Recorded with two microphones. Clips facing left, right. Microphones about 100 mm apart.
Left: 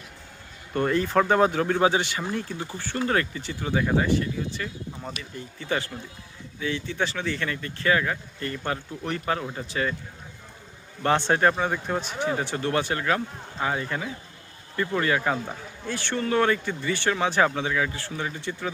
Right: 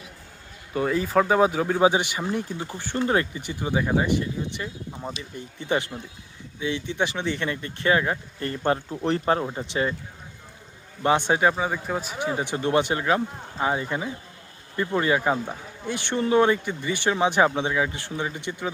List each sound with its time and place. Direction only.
0.7 s speech: 5° right (ahead or behind); by 9.9 s 25° right (ahead or behind)
11.0 s speech: 15° right (ahead or behind)